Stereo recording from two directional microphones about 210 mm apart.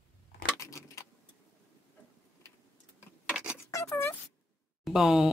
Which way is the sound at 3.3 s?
5° right (ahead or behind).